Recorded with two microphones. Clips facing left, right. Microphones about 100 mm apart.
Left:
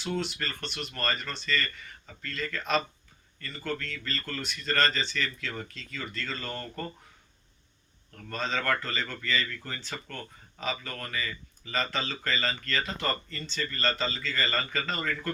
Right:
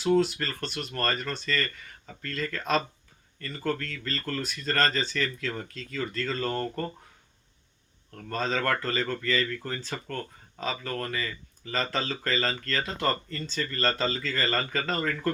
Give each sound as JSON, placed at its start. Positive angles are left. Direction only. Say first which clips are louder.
{"t": 0.0, "sound": "speech", "louder": "right 8 dB", "side_deg": -40}
{"t": 8.1, "sound": "speech", "louder": "right 3 dB", "side_deg": -40}